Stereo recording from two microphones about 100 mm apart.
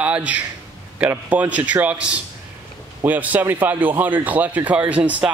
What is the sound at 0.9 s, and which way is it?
Speech, 20° right (ahead or behind).